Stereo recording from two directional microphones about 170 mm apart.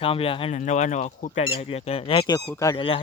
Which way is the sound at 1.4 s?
35° left (ahead or behind).